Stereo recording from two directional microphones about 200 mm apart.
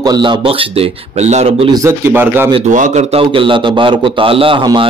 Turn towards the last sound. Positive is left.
turn(degrees=-25)  # may be behind; listen again after turning